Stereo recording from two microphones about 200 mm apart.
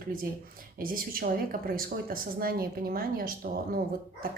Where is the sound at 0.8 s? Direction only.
45° right (ahead or behind).